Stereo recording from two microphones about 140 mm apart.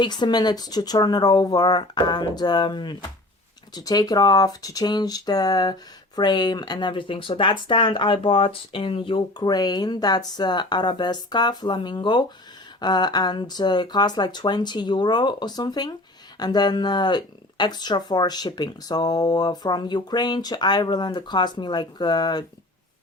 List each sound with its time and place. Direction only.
0.0 s speech: 30° left (ahead or behind)